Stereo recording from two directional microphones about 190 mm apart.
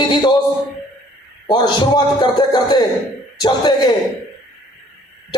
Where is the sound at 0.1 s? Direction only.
25° left (ahead or behind).